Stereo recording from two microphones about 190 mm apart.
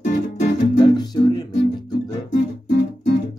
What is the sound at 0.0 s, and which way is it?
Music, 40° left (ahead or behind).